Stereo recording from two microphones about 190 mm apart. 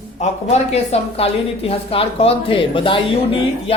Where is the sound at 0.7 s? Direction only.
30° left (ahead or behind).